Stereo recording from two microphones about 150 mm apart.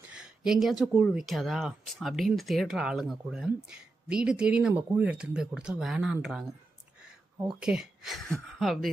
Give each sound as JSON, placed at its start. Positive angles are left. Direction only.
{"t": 0.1, "sound": "speech", "side_deg": -5}
{"t": 7.6, "sound": "speech", "side_deg": -5}